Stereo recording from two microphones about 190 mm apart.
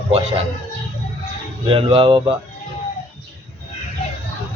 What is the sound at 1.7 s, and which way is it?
Speech, 30° right (ahead or behind).